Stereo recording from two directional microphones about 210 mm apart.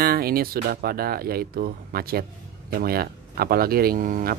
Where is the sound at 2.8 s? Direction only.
45° right (ahead or behind).